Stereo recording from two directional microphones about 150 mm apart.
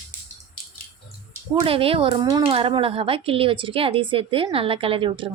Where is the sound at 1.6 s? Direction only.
40° right (ahead or behind).